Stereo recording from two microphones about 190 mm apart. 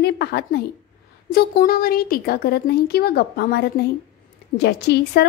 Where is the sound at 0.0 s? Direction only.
60° left (ahead or behind).